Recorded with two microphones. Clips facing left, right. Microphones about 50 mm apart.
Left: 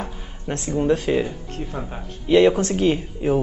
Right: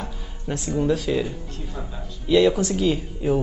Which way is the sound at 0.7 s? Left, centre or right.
Left.